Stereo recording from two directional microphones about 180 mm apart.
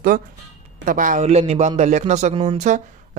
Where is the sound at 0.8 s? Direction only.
45° right (ahead or behind).